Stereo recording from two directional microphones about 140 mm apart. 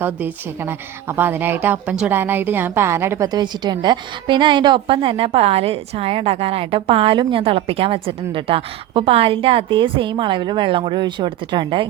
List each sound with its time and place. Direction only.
0.0 s a woman's voice: 15° right (ahead or behind)
3.2 s a woman's voice: 30° right (ahead or behind)